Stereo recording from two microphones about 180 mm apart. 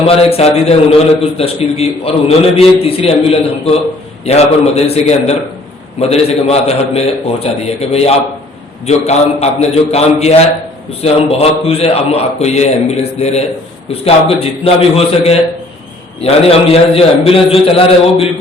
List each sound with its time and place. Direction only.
0.1 s a man's voice: 35° left (ahead or behind)